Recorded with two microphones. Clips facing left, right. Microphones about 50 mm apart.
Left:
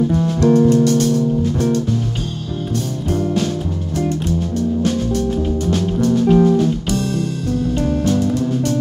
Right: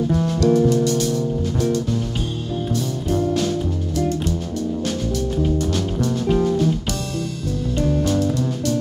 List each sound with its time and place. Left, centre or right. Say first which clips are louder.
0.1 s music: left 2 dB; centre
0.4 s music: left 4 dB; left
6.1 s music: left 6 dB; centre
8.2 s music: left 3 dB; centre